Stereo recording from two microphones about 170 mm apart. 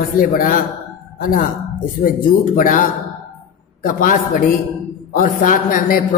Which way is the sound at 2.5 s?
55° left (ahead or behind).